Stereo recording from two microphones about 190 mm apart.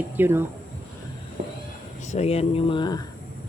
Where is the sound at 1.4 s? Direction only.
45° right (ahead or behind).